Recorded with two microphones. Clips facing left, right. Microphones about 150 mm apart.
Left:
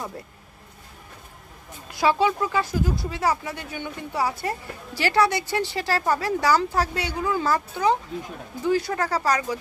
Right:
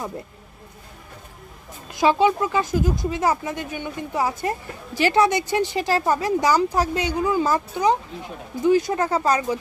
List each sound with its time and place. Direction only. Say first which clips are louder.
1.9 s speech: right 3 dB; 20° right (ahead or behind)